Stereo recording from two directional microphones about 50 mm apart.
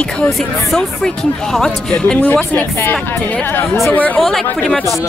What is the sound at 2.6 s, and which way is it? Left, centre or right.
Speech, left.